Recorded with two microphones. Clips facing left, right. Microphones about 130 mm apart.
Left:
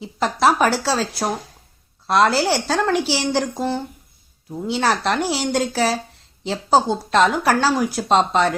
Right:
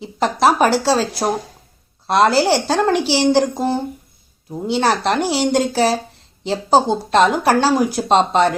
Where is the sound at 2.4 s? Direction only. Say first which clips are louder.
Right 4 dB; 30° right (ahead or behind).